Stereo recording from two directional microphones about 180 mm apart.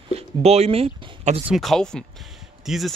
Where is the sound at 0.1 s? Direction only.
35° right (ahead or behind).